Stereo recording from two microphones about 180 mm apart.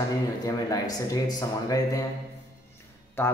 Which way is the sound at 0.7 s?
20° left (ahead or behind).